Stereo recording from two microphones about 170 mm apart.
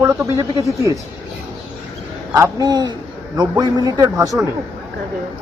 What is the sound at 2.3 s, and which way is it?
A man's voice, 20° right (ahead or behind).